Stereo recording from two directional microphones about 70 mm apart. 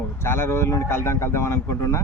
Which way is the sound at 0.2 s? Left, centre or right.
Left.